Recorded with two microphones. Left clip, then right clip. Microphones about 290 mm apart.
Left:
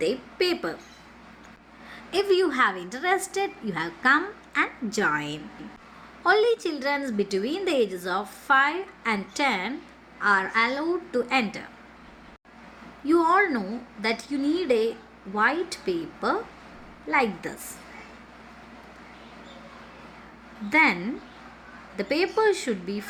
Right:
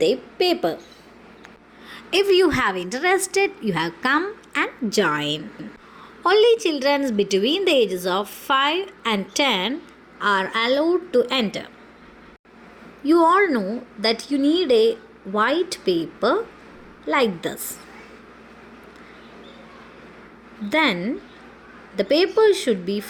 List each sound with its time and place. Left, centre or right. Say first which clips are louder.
0.0 s a woman's voice: right 6 dB; centre
1.9 s a woman's voice: right 5 dB; centre
13.1 s a woman's voice: right 5 dB; centre
20.7 s a woman's voice: right 1 dB; centre